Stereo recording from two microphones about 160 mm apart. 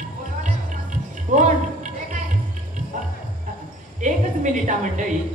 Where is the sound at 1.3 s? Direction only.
50° right (ahead or behind).